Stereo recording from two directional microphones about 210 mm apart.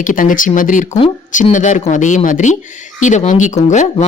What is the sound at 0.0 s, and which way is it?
A woman's voice, 40° left (ahead or behind).